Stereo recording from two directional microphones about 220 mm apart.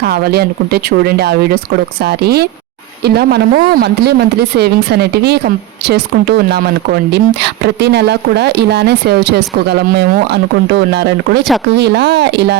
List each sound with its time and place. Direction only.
0.0 s speech: 45° right (ahead or behind)